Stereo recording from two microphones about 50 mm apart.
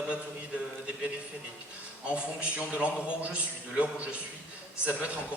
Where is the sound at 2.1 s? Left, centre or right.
Right.